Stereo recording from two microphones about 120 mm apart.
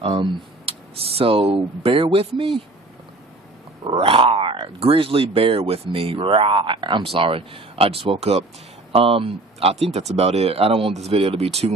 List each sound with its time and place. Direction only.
0.0 s speech: 45° right (ahead or behind)
3.8 s speech: 50° right (ahead or behind)